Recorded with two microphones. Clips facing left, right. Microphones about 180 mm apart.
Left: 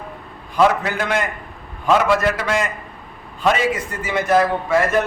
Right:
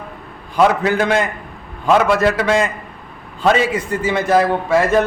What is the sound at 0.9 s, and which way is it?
A man's voice, 30° right (ahead or behind).